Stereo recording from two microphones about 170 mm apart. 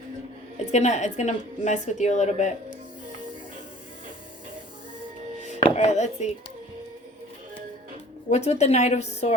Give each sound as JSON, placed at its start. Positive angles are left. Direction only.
{"t": 0.5, "sound": "a woman's voice", "side_deg": 40}
{"t": 5.6, "sound": "music", "side_deg": 40}
{"t": 8.3, "sound": "a woman's voice", "side_deg": 40}